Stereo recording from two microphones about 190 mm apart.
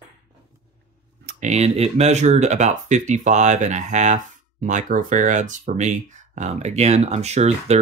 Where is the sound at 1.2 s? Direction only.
35° right (ahead or behind).